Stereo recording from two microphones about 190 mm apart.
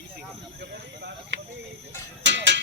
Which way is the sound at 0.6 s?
60° right (ahead or behind).